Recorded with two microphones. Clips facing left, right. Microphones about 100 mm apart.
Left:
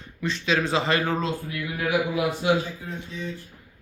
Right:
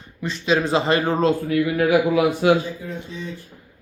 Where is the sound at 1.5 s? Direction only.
80° right.